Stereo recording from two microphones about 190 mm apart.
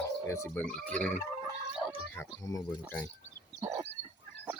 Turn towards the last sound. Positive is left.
turn(degrees=-15)  # may be behind; listen again after turning